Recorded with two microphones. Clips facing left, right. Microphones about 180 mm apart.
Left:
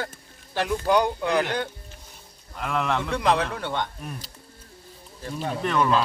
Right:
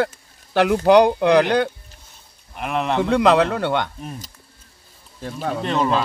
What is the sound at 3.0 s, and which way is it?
Speech, 70° right (ahead or behind).